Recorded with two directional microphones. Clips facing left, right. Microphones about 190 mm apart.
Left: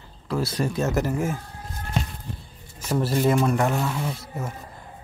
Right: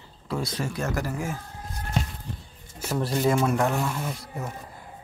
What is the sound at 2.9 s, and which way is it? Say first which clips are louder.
Speech: left 2 dB; centre (ahead or behind).